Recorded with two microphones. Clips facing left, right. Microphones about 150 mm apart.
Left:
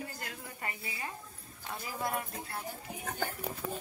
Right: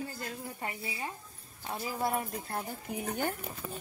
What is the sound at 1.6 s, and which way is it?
Speech, 30° right (ahead or behind).